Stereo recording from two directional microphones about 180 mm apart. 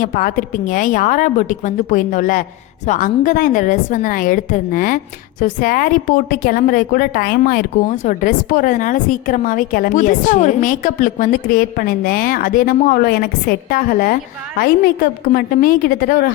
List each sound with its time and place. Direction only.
0.0 s a woman's voice: 50° left (ahead or behind)